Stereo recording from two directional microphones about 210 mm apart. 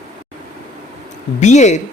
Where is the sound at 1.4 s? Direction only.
35° left (ahead or behind).